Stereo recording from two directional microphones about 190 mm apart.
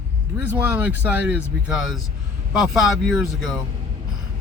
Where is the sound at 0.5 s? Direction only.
10° right (ahead or behind).